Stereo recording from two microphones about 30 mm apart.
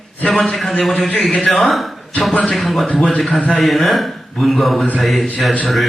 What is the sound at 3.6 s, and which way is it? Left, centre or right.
A man's voice, centre.